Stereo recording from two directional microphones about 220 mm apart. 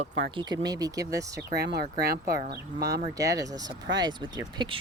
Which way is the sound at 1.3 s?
50° right (ahead or behind).